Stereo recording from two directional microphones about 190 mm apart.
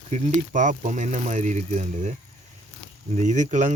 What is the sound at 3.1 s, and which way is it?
Speech, 40° right (ahead or behind).